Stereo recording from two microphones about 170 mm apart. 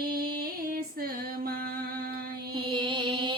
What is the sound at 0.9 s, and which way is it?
Female singing, 60° right (ahead or behind).